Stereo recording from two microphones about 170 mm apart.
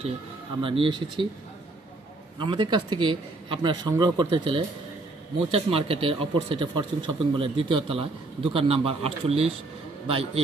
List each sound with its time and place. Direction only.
0.6 s a man's voice: 30° right (ahead or behind)
2.3 s a man's voice: 30° right (ahead or behind)